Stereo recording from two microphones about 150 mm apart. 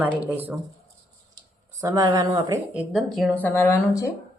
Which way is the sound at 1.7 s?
25° right (ahead or behind).